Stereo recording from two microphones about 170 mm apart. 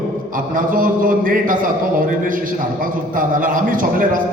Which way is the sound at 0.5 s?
55° right (ahead or behind).